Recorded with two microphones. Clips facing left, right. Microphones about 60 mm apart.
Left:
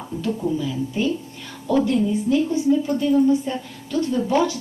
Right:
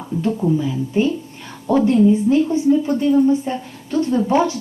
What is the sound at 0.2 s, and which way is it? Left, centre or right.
A woman's voice, right.